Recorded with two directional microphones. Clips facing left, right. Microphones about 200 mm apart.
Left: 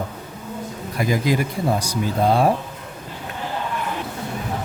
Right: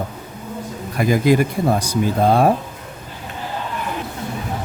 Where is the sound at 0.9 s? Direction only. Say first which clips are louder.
Right 5 dB; 55° right (ahead or behind).